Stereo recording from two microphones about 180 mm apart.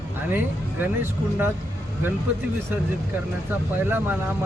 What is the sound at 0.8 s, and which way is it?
Speech, 10° right (ahead or behind).